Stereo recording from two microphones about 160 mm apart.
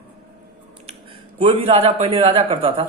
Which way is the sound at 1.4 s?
35° right (ahead or behind).